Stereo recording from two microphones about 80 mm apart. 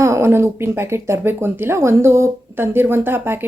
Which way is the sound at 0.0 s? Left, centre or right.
Right.